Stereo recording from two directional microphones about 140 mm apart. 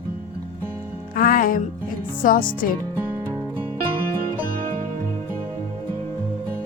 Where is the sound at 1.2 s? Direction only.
80° left.